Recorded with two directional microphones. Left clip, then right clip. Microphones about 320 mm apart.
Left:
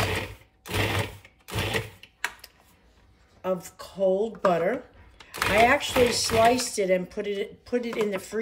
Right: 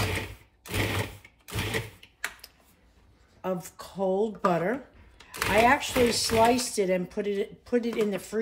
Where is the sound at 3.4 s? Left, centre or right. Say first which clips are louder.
Left 3 dB; centre.